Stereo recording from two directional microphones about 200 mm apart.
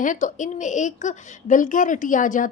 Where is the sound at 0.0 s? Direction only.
40° left (ahead or behind).